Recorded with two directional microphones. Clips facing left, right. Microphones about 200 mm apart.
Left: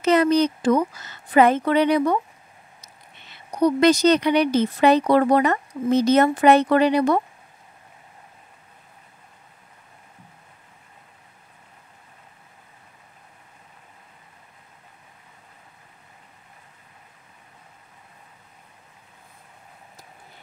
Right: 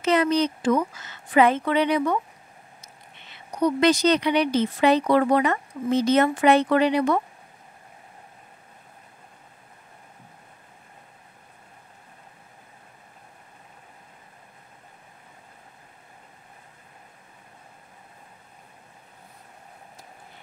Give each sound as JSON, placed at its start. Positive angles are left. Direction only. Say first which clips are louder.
{"t": 0.0, "sound": "speech", "louder": "left 3 dB", "side_deg": 40}
{"t": 3.5, "sound": "speech", "louder": "left 3 dB", "side_deg": 40}